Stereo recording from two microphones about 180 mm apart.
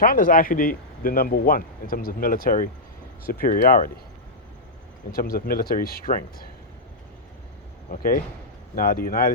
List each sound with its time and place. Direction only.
0.0 s speech: 50° left (ahead or behind)
5.1 s speech: 55° left (ahead or behind)
7.9 s speech: 50° left (ahead or behind)